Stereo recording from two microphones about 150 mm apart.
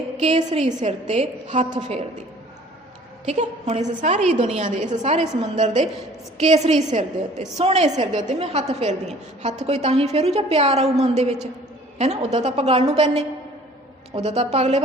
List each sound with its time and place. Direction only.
0.2 s a woman's voice: 45° right (ahead or behind)
3.2 s a woman's voice: 50° right (ahead or behind)
4.7 s a woman's voice: 55° right (ahead or behind)